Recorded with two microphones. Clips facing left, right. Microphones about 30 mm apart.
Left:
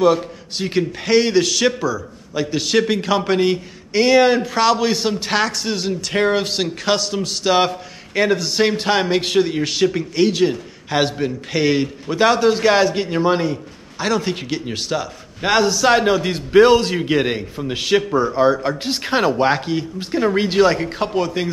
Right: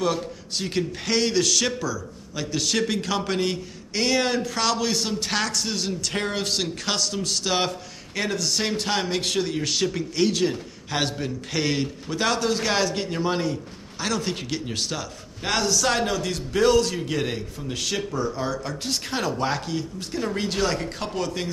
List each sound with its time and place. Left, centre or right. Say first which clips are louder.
0.0 s a man's voice: left 9 dB; centre